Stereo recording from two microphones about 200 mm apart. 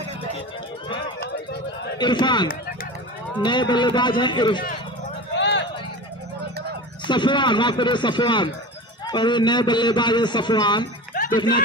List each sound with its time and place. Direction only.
2.0 s a man's voice: 20° left (ahead or behind)
5.3 s a sound: 60° left (ahead or behind)
7.1 s a man's voice: 25° left (ahead or behind)
11.1 s music: 40° left (ahead or behind)